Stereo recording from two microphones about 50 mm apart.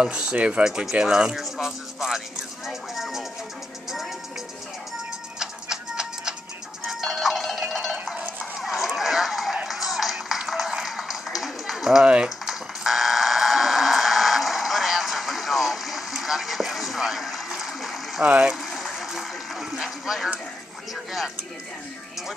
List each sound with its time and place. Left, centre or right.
0.0 s speech: centre
1.3 s speech: centre
5.4 s cat: centre
6.9 s music: centre
8.5 s a sound: centre
9.7 s music: centre
10.7 s a sound: centre
11.3 s run: centre
12.0 s speech: right
12.4 s fire alarm: centre
18.2 s speech: right
18.7 s a sound: centre